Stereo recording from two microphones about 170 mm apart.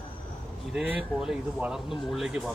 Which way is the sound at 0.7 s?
5° right (ahead or behind).